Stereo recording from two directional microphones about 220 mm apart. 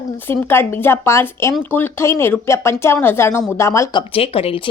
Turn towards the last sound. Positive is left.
turn(degrees=25)  # may be behind; listen again after turning